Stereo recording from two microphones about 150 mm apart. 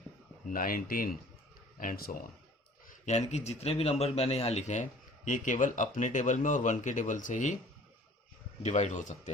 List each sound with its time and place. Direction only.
0.5 s speech: 70° left (ahead or behind)
2.9 s a man's voice: 50° left (ahead or behind)
8.6 s a man's voice: 55° left (ahead or behind)